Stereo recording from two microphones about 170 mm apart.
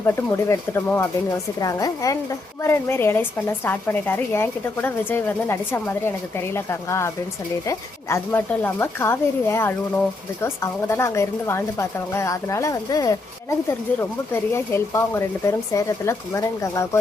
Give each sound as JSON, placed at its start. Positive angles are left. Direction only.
{"t": 0.0, "sound": "a woman's voice", "side_deg": 15}